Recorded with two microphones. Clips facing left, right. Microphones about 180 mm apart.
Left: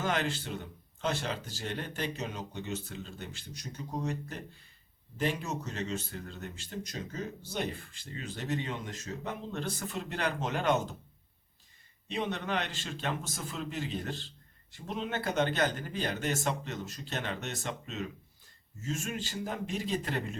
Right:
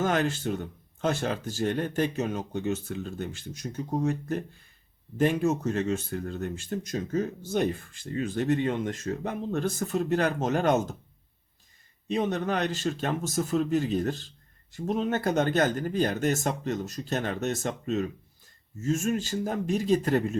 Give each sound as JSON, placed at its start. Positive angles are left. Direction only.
{"t": 0.0, "sound": "speech", "side_deg": -45}
{"t": 12.0, "sound": "speech", "side_deg": -45}